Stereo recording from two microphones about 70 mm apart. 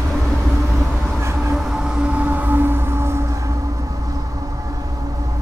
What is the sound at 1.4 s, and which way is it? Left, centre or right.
Music, centre.